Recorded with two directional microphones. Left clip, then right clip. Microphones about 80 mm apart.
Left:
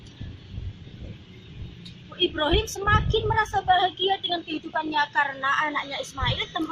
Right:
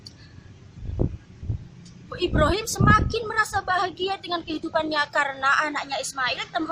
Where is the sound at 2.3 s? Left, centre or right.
Right.